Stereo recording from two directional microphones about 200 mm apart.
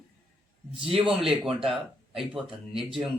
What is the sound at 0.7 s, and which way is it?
Speech, 25° right (ahead or behind).